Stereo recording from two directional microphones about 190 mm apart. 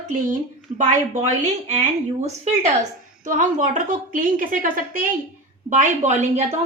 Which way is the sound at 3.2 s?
40° right (ahead or behind).